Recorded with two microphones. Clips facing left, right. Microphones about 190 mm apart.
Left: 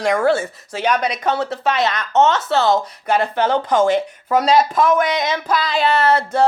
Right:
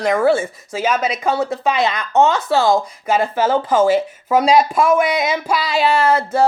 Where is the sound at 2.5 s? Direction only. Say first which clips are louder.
Right 1 dB; 10° right (ahead or behind).